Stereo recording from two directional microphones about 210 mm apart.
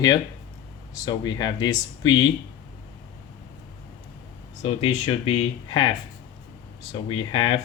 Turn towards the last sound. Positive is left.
turn(degrees=20)  # may be behind; listen again after turning